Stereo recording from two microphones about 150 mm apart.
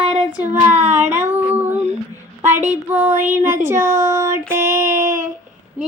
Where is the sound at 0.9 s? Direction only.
50° right (ahead or behind).